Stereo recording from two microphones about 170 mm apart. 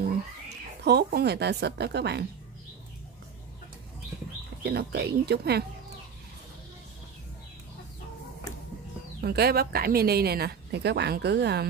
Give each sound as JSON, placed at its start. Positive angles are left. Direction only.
{"t": 0.8, "sound": "a woman's voice", "side_deg": -75}
{"t": 4.6, "sound": "a woman's voice", "side_deg": -75}
{"t": 9.2, "sound": "a woman's voice", "side_deg": -70}